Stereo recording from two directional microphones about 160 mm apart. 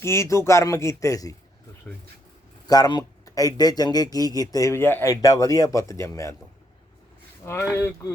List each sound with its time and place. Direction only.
0.0 s speech: 15° left (ahead or behind)
2.6 s speech: 25° left (ahead or behind)
7.4 s speech: 15° left (ahead or behind)